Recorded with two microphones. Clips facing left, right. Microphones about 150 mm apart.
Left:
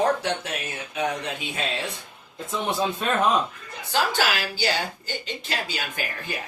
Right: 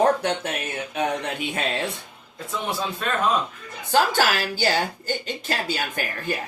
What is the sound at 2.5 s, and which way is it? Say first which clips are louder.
Speech: left 2 dB; 20° left (ahead or behind).